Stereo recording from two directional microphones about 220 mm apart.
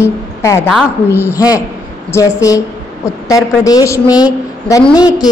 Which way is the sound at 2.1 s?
15° left (ahead or behind).